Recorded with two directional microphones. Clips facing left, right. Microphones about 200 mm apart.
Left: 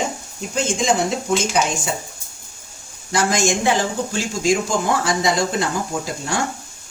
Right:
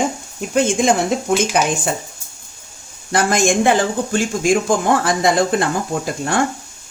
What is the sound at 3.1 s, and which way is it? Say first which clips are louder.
Speech: right 3 dB; 55° right (ahead or behind).